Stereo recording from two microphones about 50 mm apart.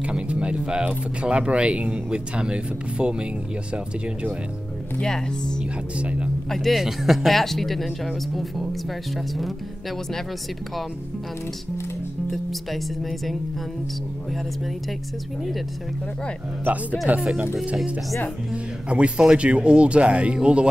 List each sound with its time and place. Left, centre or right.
0.0 s speech: right
5.0 s speech: centre
5.9 s speech: right
6.5 s speech: centre
12.3 s speech: centre
17.1 s speech: centre
18.5 s speech: right